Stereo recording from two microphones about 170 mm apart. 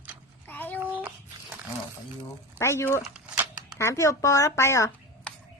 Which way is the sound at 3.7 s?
15° left (ahead or behind).